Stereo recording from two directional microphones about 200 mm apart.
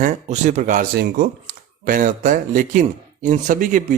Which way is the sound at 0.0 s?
35° right (ahead or behind).